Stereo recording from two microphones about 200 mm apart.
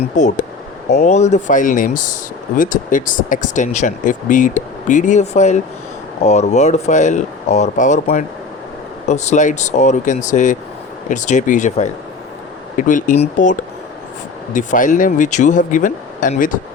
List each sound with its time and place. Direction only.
0.0 s speech: 40° left (ahead or behind)